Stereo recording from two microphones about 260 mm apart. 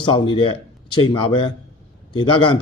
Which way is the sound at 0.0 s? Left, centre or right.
Centre.